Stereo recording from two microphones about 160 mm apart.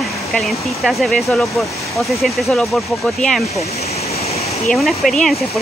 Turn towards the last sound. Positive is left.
turn(degrees=0)  # may be behind; listen again after turning